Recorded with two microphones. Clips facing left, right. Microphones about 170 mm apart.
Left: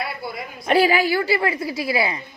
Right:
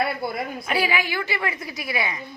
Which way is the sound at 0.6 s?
40° left (ahead or behind).